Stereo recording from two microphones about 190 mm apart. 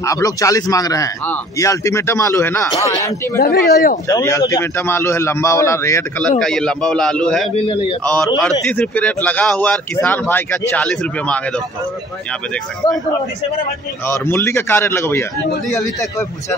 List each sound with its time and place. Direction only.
0.0 s speech: 15° left (ahead or behind)
3.3 s speech: 55° left (ahead or behind)
4.1 s a man's voice: 15° left (ahead or behind)
7.5 s a man's voice: 30° left (ahead or behind)
8.0 s speech: 5° left (ahead or behind)
14.0 s speech: 10° left (ahead or behind)